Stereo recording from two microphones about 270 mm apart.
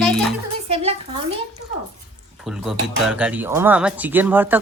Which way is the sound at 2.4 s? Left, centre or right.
Centre.